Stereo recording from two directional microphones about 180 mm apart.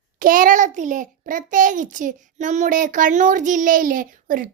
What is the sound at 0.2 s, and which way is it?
A child's voice, 50° right (ahead or behind).